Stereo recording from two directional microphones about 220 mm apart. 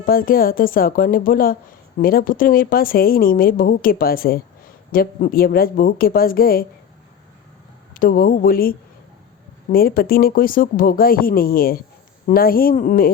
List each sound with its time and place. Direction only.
0.0 s a woman's voice: 40° left (ahead or behind)
7.9 s a woman's voice: 40° left (ahead or behind)